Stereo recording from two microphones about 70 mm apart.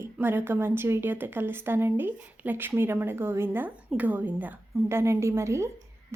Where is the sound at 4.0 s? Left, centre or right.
Right.